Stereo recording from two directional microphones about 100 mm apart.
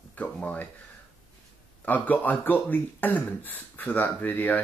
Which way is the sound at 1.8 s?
15° left (ahead or behind).